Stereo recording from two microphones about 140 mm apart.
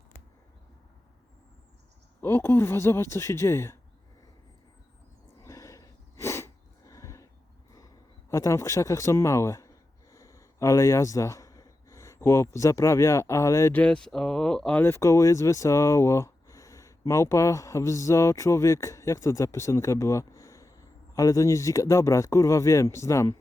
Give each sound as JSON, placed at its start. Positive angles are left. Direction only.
{"t": 2.2, "sound": "speech", "side_deg": 15}
{"t": 5.4, "sound": "sneeze", "side_deg": 20}
{"t": 8.3, "sound": "a man's voice", "side_deg": 20}
{"t": 13.7, "sound": "speech", "side_deg": 5}